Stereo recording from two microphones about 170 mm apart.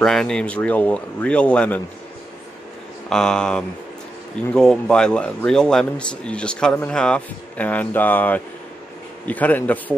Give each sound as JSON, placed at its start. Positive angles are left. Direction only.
{"t": 0.0, "sound": "speech", "side_deg": 5}
{"t": 3.1, "sound": "speech", "side_deg": 5}